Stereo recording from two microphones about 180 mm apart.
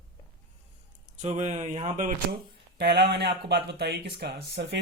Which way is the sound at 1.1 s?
40° right (ahead or behind).